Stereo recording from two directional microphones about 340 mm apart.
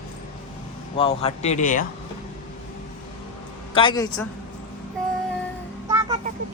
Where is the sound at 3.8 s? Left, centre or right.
Centre.